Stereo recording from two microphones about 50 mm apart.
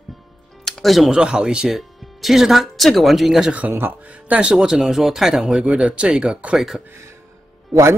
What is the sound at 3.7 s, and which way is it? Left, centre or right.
Speech, right.